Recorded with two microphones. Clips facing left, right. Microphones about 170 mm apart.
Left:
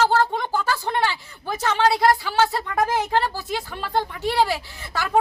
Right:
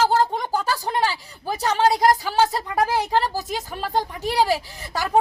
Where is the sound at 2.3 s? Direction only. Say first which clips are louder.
Right 1 dB; 15° right (ahead or behind).